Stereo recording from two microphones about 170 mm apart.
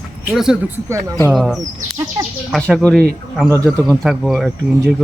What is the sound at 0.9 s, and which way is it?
Speech, 15° right (ahead or behind).